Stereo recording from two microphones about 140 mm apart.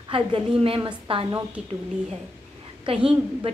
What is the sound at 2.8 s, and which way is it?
Speech, 40° right (ahead or behind).